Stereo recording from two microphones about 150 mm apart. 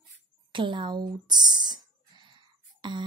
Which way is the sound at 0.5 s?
30° right (ahead or behind).